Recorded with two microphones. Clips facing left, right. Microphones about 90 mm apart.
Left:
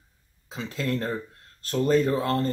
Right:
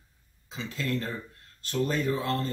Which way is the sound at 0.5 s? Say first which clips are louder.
Left 3 dB; 50° left (ahead or behind).